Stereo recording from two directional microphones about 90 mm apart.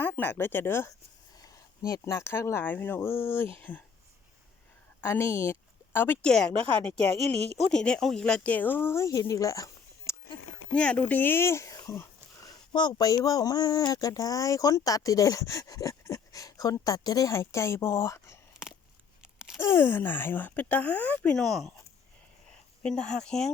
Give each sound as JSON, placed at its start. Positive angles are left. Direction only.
{"t": 0.0, "sound": "speech", "side_deg": 20}
{"t": 4.9, "sound": "speech", "side_deg": 25}
{"t": 6.2, "sound": "a woman's voice", "side_deg": 10}
{"t": 10.8, "sound": "speech", "side_deg": 15}
{"t": 12.5, "sound": "speech", "side_deg": 55}
{"t": 18.5, "sound": "a sound", "side_deg": -5}
{"t": 19.5, "sound": "speech", "side_deg": 30}
{"t": 21.3, "sound": "speech", "side_deg": 5}
{"t": 22.8, "sound": "a woman's voice", "side_deg": 5}